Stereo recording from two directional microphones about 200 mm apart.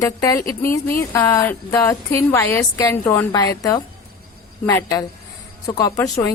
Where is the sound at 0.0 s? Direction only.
15° left (ahead or behind).